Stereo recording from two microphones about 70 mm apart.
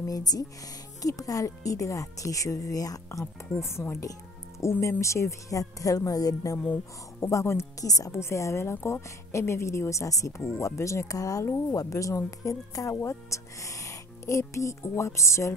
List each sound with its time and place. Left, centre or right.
0.0 s a woman's voice: left
4.1 s music: left
5.0 s a woman's voice: left
7.2 s a woman's voice: left
8.1 s a woman's voice: left
12.9 s speech: left